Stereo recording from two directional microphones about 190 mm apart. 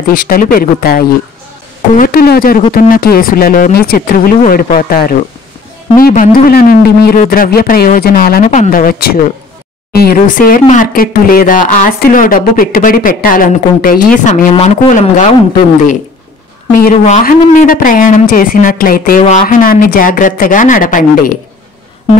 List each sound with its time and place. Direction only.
0.1 s speech: 50° left (ahead or behind)
16.8 s speech: 45° left (ahead or behind)